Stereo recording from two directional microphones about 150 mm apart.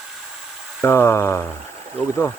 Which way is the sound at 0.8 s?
15° left (ahead or behind).